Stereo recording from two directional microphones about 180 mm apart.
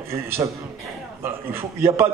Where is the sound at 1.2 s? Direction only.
15° right (ahead or behind).